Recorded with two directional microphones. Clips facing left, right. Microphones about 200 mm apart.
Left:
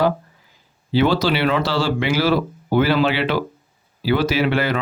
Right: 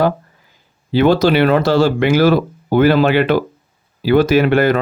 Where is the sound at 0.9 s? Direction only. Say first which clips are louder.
Right 6 dB; 50° right (ahead or behind).